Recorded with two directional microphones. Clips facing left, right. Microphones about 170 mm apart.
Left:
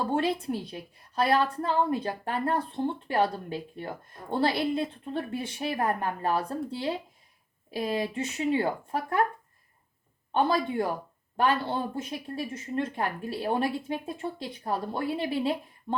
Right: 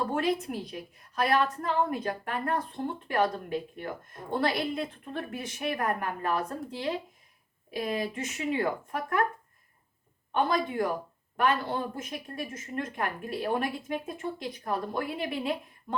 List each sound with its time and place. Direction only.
0.1 s a woman's voice: 30° left (ahead or behind)
10.3 s a woman's voice: 30° left (ahead or behind)